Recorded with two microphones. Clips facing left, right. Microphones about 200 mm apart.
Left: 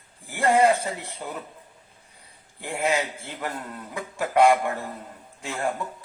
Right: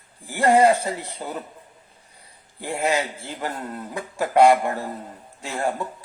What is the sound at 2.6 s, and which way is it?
Speech, 35° right (ahead or behind).